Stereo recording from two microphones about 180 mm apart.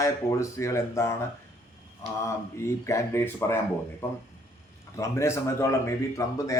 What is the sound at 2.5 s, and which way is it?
A man's voice, 15° left (ahead or behind).